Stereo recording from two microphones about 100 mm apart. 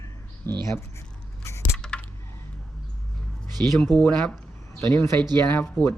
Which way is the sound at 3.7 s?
5° left (ahead or behind).